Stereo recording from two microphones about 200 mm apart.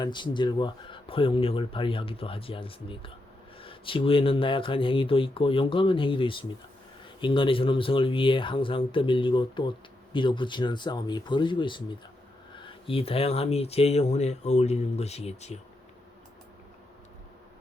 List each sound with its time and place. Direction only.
0.0 s speech: 25° left (ahead or behind)